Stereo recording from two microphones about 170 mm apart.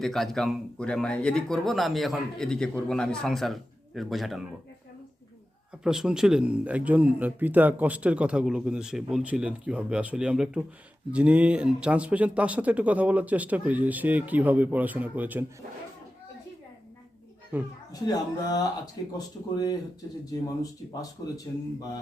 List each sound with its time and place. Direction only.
0.0 s speech: centre (ahead or behind)
5.8 s speech: 5° right (ahead or behind)
17.5 s speech: 10° right (ahead or behind)
18.0 s speech: 25° left (ahead or behind)